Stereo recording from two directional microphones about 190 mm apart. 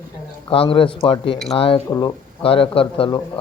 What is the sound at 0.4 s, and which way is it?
Speech, 30° left (ahead or behind).